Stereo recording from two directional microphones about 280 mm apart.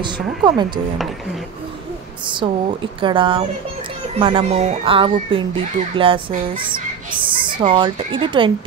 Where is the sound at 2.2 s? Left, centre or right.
Centre.